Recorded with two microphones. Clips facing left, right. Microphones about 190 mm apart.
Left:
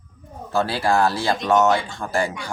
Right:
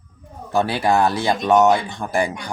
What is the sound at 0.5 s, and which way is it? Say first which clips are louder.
Speech: right 2 dB; 20° right (ahead or behind).